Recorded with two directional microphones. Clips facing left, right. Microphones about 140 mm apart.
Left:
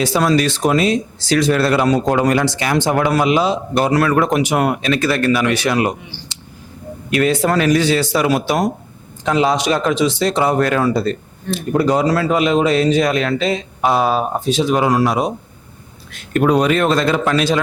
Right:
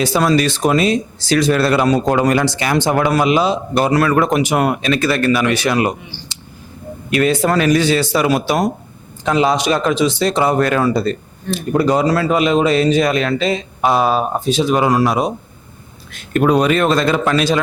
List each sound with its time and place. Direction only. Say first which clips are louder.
0.0 s speech: right 1 dB; 20° right (ahead or behind)
7.1 s speech: right 1 dB; 15° right (ahead or behind)